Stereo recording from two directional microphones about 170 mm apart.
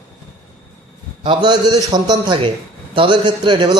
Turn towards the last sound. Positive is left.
turn(degrees=-25)  # may be behind; listen again after turning